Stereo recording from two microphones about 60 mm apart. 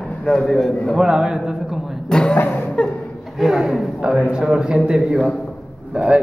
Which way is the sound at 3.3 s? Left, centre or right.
Centre.